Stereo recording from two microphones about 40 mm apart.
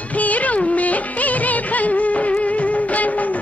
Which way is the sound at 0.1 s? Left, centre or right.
Left.